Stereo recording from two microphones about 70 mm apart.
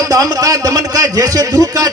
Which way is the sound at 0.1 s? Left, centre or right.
Right.